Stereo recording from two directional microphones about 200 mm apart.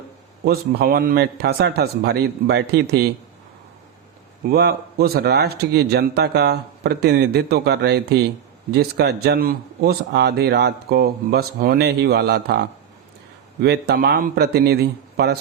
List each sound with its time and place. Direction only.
0.4 s speech: 50° right (ahead or behind)
4.4 s speech: 50° right (ahead or behind)